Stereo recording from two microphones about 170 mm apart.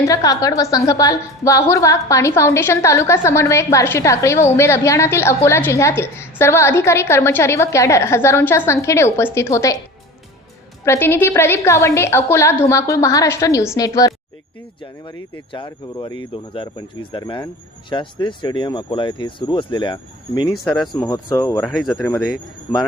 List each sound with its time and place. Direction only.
0.1 s a woman's voice: 20° left (ahead or behind)
10.8 s a woman's voice: 15° left (ahead or behind)
15.5 s speech: 25° left (ahead or behind)
20.5 s speech: centre (ahead or behind)
20.9 s speech: 20° left (ahead or behind)
21.6 s speech: centre (ahead or behind)